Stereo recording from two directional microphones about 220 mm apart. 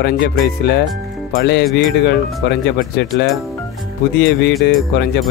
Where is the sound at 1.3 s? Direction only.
50° left (ahead or behind).